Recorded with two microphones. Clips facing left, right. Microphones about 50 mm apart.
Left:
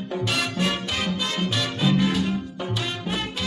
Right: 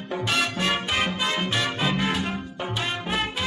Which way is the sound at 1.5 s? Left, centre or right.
Right.